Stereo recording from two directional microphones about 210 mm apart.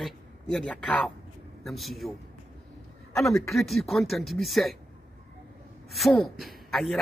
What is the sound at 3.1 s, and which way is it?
Speech, centre (ahead or behind).